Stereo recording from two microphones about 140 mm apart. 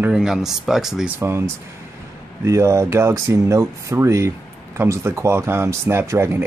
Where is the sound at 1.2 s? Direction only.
20° right (ahead or behind).